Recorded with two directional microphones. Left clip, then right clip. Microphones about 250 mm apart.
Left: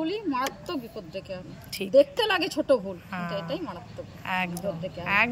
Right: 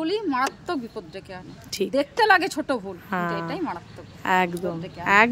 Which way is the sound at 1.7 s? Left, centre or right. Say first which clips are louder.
Left 4 dB; centre.